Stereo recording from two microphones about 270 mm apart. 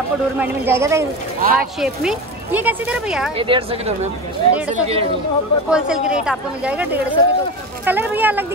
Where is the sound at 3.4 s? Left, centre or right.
Centre.